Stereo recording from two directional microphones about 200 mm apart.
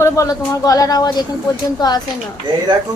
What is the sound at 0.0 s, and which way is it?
A woman's voice, 15° left (ahead or behind).